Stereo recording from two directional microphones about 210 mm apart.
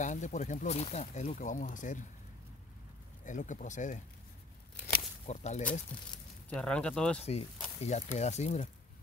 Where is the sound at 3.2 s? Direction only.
35° left (ahead or behind).